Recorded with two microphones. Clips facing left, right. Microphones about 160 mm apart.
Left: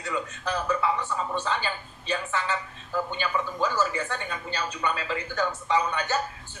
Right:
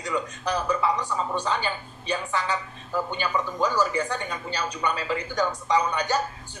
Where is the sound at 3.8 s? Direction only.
15° right (ahead or behind).